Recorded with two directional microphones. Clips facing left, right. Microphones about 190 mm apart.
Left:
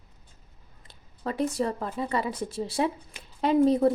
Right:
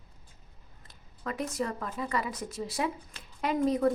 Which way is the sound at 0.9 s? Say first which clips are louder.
Left 4 dB; 30° left (ahead or behind).